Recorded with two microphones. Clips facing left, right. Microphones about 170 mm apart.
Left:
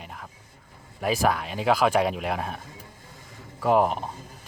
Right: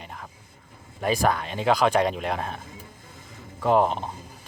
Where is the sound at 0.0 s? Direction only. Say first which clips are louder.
Right 1 dB; centre (ahead or behind).